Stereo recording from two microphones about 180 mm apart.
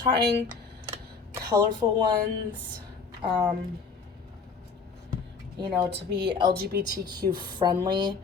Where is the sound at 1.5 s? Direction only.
25° right (ahead or behind).